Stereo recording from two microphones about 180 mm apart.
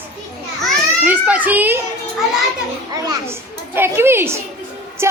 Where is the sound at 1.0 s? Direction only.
10° right (ahead or behind).